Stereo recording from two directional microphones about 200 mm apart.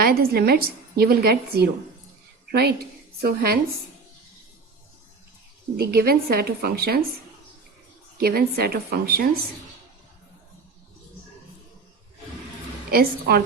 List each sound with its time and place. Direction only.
0.0 s a woman's voice: 50° right (ahead or behind)
3.2 s a woman's voice: 50° right (ahead or behind)
5.7 s a woman's voice: 50° right (ahead or behind)
8.2 s a woman's voice: 50° right (ahead or behind)
12.9 s a woman's voice: 50° right (ahead or behind)